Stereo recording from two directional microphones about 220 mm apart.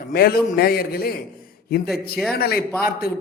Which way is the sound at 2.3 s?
45° left (ahead or behind).